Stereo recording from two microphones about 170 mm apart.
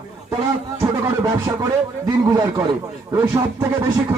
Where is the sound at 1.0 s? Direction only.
25° right (ahead or behind).